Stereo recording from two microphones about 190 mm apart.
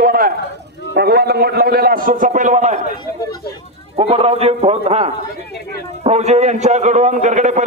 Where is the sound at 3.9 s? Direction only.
30° right (ahead or behind).